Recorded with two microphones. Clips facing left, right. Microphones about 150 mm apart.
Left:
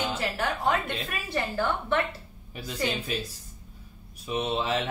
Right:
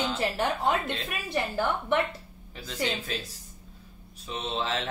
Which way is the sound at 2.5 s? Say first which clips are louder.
Left 1 dB; 15° left (ahead or behind).